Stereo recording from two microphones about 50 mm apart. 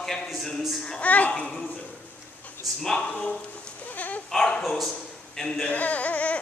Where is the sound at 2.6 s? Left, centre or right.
Centre.